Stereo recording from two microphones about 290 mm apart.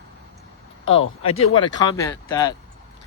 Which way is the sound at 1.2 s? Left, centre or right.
Left.